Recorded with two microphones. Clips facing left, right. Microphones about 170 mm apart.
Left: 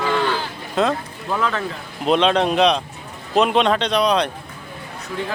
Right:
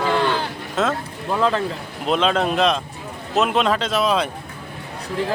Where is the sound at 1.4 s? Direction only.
30° right (ahead or behind).